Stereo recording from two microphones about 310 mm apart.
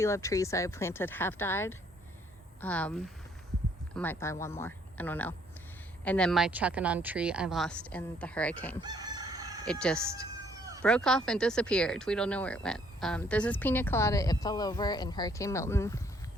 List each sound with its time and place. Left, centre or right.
0.0 s speech: centre
8.8 s chicken: centre
9.6 s speech: centre